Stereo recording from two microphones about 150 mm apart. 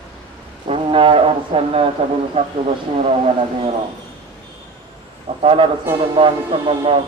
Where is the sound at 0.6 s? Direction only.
40° right (ahead or behind).